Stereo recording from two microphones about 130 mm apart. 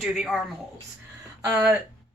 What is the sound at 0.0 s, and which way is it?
Speech, centre (ahead or behind).